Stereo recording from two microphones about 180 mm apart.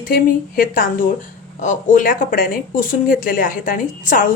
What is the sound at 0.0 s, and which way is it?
Speech, 50° left (ahead or behind).